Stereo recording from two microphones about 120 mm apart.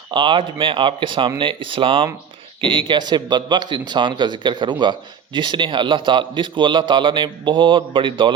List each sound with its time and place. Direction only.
0.1 s a man's voice: 40° right (ahead or behind)